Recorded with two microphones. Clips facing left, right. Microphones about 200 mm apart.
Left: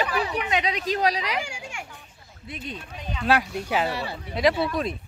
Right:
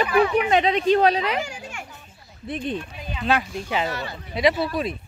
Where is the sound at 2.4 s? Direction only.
50° right (ahead or behind).